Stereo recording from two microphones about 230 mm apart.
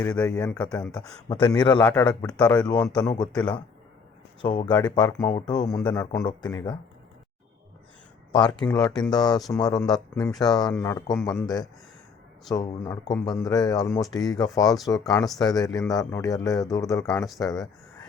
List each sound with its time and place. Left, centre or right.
0.0 s speech: centre
1.3 s speech: centre
4.4 s speech: centre
4.7 s speech: centre
5.3 s speech: centre
8.3 s speech: centre